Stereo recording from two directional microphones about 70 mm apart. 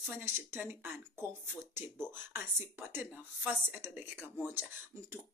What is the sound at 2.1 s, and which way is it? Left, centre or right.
Speech, right.